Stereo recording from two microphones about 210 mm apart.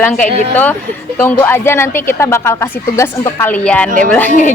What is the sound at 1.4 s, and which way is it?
Speech, 10° left (ahead or behind).